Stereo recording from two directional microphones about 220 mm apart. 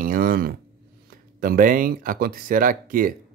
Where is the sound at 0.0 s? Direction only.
40° right (ahead or behind).